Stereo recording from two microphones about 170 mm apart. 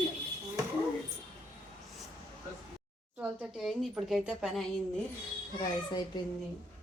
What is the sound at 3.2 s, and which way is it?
A woman's voice, 5° right (ahead or behind).